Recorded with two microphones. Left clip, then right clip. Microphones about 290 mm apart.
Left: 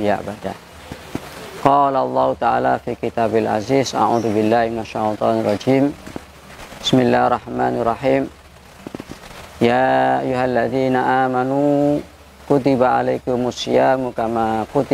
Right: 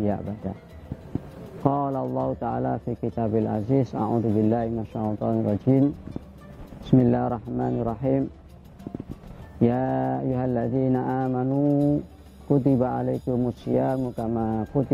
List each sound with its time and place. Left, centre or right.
0.0 s speech: centre
1.7 s speech: centre
2.4 s speech: centre
9.6 s speech: centre